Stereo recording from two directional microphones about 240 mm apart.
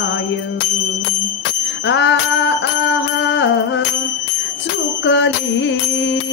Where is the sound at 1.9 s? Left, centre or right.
Left.